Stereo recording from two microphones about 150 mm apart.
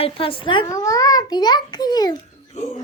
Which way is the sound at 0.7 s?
20° left (ahead or behind).